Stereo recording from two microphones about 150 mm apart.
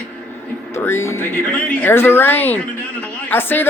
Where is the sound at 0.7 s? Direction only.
15° left (ahead or behind).